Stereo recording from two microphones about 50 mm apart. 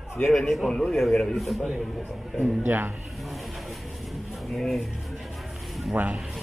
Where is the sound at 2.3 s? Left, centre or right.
Right.